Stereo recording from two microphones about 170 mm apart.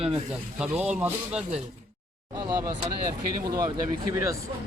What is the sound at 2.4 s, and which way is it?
Speech, 20° right (ahead or behind).